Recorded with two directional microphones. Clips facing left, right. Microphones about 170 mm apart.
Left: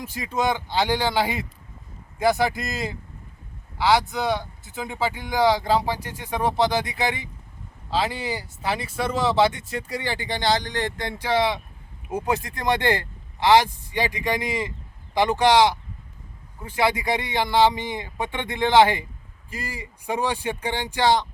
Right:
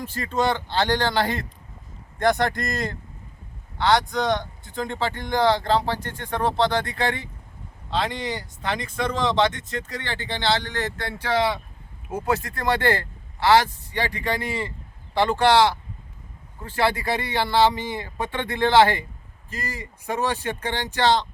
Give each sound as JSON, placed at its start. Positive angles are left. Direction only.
{"t": 0.0, "sound": "speech", "side_deg": 15}